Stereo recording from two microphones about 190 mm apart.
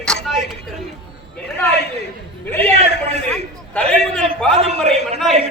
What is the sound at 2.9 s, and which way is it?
Speech, 60° left (ahead or behind).